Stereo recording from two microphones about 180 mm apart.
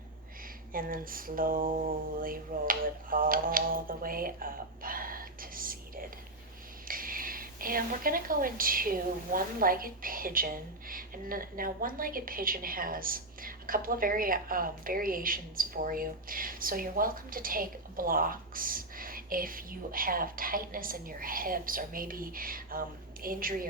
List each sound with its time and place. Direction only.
0.7 s speech: 50° right (ahead or behind)